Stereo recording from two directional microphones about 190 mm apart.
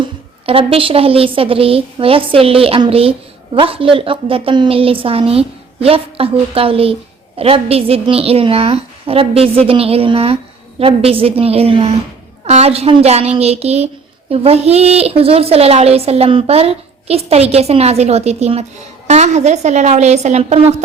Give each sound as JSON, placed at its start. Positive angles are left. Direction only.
{"t": 0.0, "sound": "a woman's voice", "side_deg": -30}